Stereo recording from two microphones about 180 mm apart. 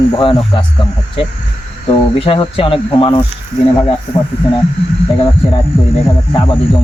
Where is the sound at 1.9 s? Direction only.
30° left (ahead or behind).